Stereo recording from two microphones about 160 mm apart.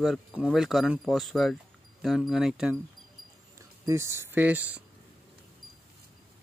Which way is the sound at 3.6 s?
20° right (ahead or behind).